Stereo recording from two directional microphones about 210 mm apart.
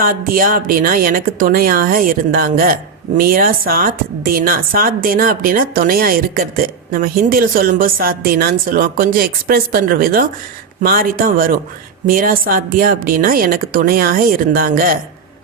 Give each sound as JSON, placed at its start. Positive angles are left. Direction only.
{"t": 0.0, "sound": "a woman's voice", "side_deg": -45}